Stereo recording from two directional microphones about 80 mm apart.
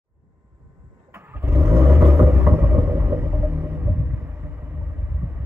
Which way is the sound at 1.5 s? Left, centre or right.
Centre.